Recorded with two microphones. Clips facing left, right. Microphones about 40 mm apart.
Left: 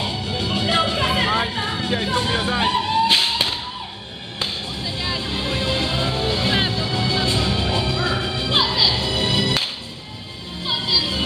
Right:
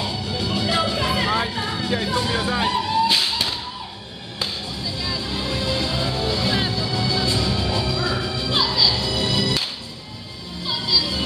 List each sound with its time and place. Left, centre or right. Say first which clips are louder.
0.0 s music: left 1 dB; left